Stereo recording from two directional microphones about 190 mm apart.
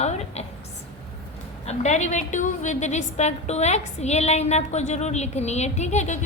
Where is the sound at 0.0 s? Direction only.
35° left (ahead or behind).